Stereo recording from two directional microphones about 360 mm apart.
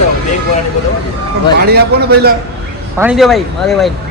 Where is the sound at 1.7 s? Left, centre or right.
Right.